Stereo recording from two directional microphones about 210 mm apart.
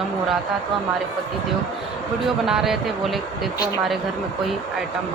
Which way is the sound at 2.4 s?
Centre (ahead or behind).